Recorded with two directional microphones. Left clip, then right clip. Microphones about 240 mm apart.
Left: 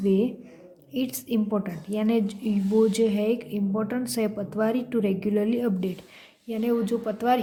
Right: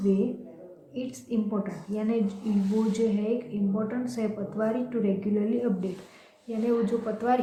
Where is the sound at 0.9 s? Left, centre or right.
Left.